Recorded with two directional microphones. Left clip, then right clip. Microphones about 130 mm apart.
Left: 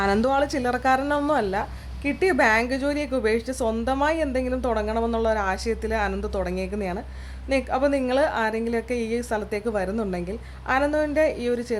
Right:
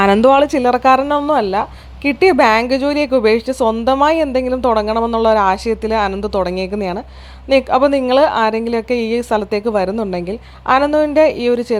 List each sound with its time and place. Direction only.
0.0 s a woman's voice: 45° right (ahead or behind); by 1.6 s 25° right (ahead or behind)
2.0 s a woman's voice: 40° right (ahead or behind)